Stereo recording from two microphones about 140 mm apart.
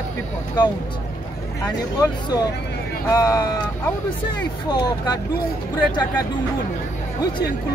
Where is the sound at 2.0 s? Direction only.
30° left (ahead or behind).